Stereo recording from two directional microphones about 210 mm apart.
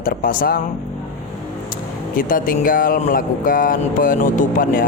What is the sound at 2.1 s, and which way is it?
Speech, 40° left (ahead or behind).